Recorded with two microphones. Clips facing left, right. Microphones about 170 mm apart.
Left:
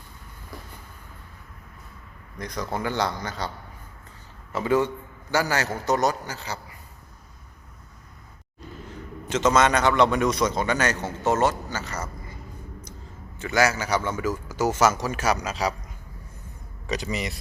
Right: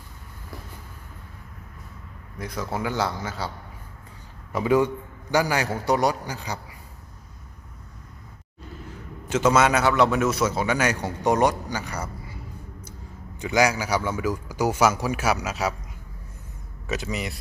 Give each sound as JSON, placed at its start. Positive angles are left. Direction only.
{"t": 2.4, "sound": "a man's voice", "side_deg": -5}
{"t": 4.5, "sound": "a man's voice", "side_deg": -10}
{"t": 9.3, "sound": "a man's voice", "side_deg": -10}
{"t": 13.4, "sound": "a man's voice", "side_deg": -15}
{"t": 16.8, "sound": "a man's voice", "side_deg": 0}